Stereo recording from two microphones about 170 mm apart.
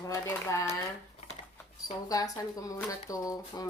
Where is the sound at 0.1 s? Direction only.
15° left (ahead or behind).